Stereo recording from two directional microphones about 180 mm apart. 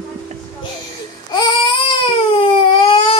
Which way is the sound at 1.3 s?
25° left (ahead or behind).